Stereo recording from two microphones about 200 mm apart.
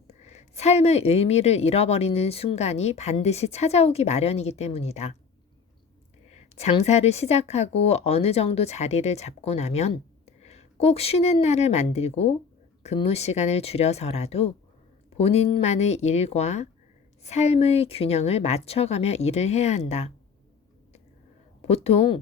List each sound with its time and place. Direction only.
0.1 s a woman's voice: 35° left (ahead or behind)
6.3 s a woman's voice: 35° left (ahead or behind)
21.6 s a woman's voice: 30° left (ahead or behind)